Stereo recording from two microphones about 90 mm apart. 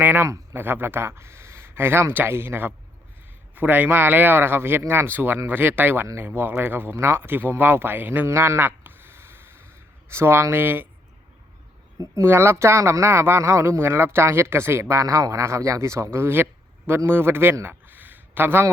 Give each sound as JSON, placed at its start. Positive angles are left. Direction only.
{"t": 0.0, "sound": "speech", "side_deg": -20}
{"t": 11.9, "sound": "a man's voice", "side_deg": -30}